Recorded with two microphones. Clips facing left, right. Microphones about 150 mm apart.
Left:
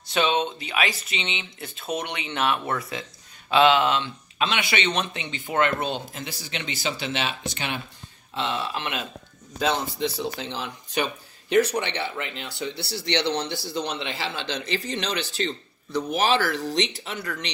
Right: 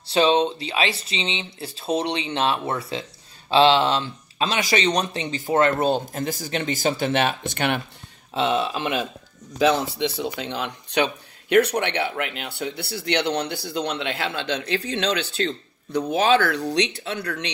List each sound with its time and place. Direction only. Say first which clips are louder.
0.0 s speech: right 5 dB; 30° right (ahead or behind); by 7.8 s 60° right (ahead or behind)
9.6 s speech: right 5 dB; 75° right (ahead or behind)